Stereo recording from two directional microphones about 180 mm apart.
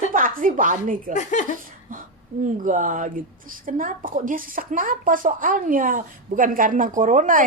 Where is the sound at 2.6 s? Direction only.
45° right (ahead or behind).